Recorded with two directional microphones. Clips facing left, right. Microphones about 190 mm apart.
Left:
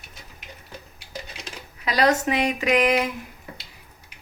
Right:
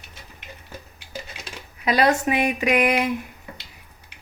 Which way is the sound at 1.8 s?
15° right (ahead or behind).